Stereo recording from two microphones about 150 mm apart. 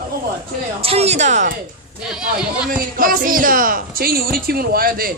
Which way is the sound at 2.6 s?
70° right (ahead or behind).